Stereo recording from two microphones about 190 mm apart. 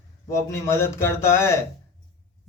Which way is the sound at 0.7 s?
15° left (ahead or behind).